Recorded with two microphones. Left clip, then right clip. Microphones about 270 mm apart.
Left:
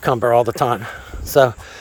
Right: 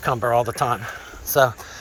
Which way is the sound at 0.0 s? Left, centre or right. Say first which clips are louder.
Left 5 dB; left.